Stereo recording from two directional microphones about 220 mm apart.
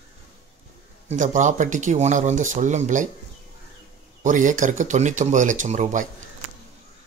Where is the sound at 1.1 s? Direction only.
35° right (ahead or behind).